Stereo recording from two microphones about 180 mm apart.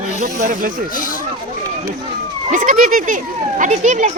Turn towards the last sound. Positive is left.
turn(degrees=-40)  # may be behind; listen again after turning